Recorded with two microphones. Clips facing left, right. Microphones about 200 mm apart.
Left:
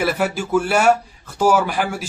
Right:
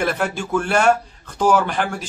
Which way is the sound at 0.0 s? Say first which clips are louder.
Left 2 dB; 5° left (ahead or behind).